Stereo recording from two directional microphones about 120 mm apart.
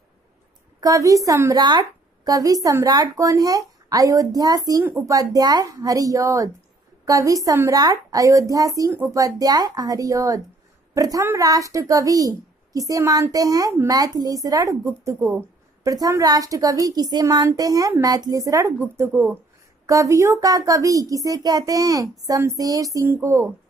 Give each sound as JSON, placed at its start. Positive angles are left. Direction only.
{"t": 0.7, "sound": "a child's voice", "side_deg": -30}